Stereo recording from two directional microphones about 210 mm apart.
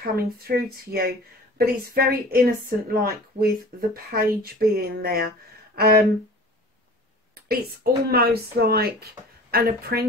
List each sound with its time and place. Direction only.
0.0 s a woman's voice: 45° right (ahead or behind)
7.3 s a woman's voice: 45° right (ahead or behind)